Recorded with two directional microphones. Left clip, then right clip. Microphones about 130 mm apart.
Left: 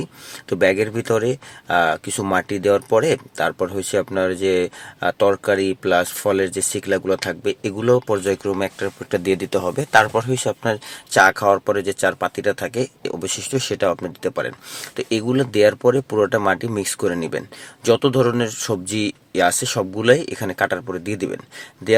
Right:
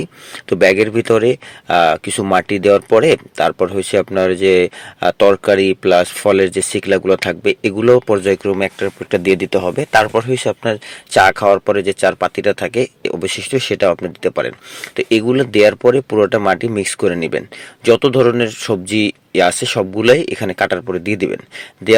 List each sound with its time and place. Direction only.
0.5 s speech: 30° right (ahead or behind)